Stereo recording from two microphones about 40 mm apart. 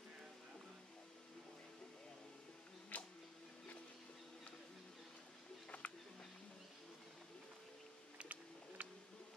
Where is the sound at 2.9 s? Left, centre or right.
Left.